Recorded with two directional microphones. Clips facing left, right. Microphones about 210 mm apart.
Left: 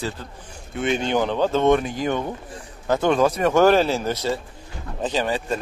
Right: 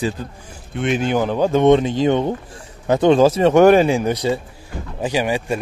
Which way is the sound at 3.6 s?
15° right (ahead or behind).